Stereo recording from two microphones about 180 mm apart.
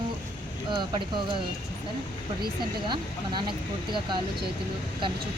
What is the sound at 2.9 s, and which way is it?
Speech, 25° right (ahead or behind).